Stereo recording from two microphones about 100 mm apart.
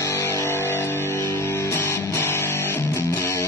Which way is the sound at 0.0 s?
30° left (ahead or behind).